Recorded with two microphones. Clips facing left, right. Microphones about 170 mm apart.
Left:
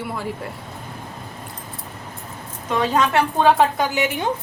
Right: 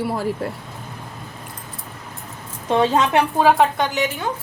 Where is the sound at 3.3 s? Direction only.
Centre (ahead or behind).